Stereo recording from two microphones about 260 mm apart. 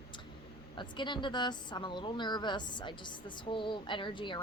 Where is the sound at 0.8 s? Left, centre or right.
Centre.